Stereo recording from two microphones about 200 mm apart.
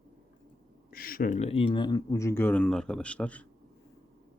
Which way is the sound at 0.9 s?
45° left (ahead or behind).